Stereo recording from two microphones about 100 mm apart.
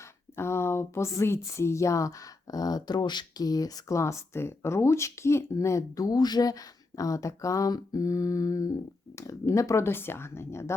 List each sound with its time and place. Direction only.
0.3 s speech: 25° left (ahead or behind)